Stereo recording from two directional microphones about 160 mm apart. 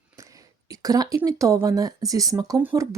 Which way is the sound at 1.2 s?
20° right (ahead or behind).